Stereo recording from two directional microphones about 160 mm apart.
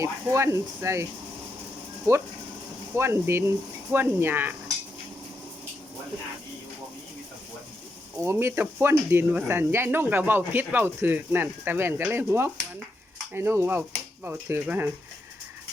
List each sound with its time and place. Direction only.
0.0 s speech: 15° right (ahead or behind)
2.1 s speech: 15° right (ahead or behind)
8.2 s speech: 15° right (ahead or behind)